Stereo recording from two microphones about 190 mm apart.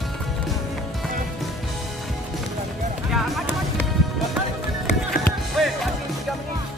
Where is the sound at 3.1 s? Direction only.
Centre (ahead or behind).